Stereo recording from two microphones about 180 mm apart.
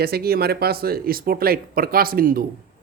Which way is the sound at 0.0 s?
60° right (ahead or behind).